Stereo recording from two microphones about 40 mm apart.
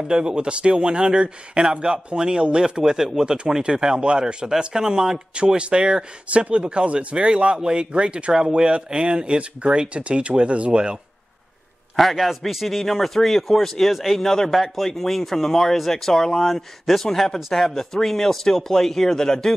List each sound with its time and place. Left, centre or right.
0.1 s speech: right
5.3 s speech: right
6.2 s speech: right
12.0 s a man's voice: centre
13.9 s a man's voice: centre
14.2 s speech: centre
14.5 s a man's voice: centre